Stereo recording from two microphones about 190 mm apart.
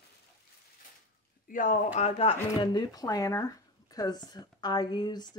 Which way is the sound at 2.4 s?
20° left (ahead or behind).